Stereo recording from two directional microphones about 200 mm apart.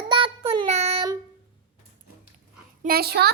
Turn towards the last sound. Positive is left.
turn(degrees=-55)  # may be behind; listen again after turning